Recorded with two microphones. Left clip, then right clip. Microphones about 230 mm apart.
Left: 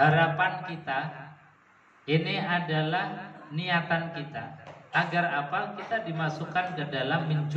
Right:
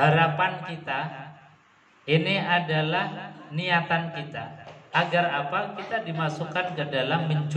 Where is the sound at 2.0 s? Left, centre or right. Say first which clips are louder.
Right 4 dB; right.